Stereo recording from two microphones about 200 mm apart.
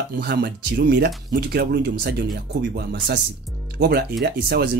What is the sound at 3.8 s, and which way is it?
Speech, 50° right (ahead or behind).